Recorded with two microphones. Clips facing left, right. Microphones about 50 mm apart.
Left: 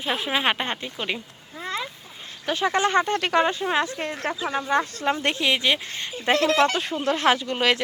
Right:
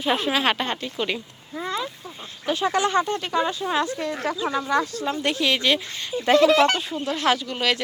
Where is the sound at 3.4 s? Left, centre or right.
Left.